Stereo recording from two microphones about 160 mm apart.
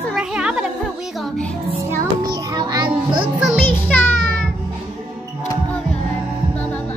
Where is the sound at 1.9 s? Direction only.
25° right (ahead or behind).